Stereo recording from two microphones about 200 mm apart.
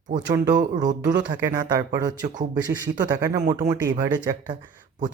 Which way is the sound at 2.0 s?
40° right (ahead or behind).